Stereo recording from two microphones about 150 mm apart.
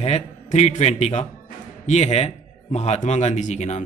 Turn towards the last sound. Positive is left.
turn(degrees=50)  # may be behind; listen again after turning